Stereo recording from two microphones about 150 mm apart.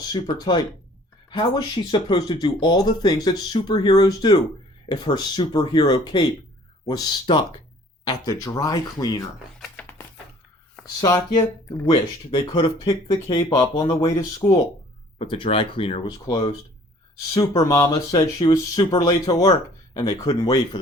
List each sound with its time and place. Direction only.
0.1 s speech: 30° left (ahead or behind)
10.8 s speech: 25° left (ahead or behind)
15.2 s speech: 35° left (ahead or behind)